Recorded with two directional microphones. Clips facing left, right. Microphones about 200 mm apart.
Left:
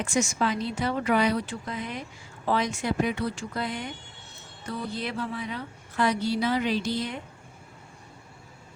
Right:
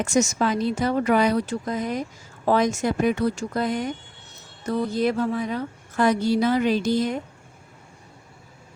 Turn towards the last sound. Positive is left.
turn(degrees=-45)  # may be behind; listen again after turning